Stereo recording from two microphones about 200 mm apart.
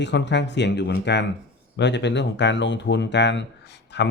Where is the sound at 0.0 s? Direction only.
60° left (ahead or behind).